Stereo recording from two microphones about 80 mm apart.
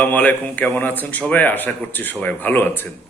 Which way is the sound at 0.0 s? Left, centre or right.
Centre.